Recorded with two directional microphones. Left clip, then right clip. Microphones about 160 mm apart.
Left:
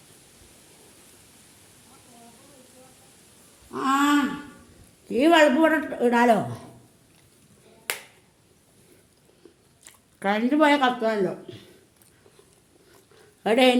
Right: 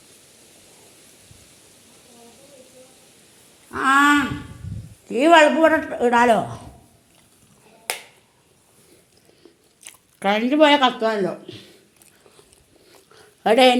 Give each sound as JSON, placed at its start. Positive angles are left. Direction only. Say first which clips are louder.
{"t": 3.8, "sound": "a sound", "louder": "right 7 dB", "side_deg": 15}
{"t": 5.0, "sound": "a woman's voice", "louder": "right 4 dB", "side_deg": 20}
{"t": 9.8, "sound": "speech", "louder": "right 4 dB", "side_deg": 0}
{"t": 11.1, "sound": "speech", "louder": "right 2 dB", "side_deg": 5}
{"t": 12.9, "sound": "dog", "louder": "right 5 dB", "side_deg": 0}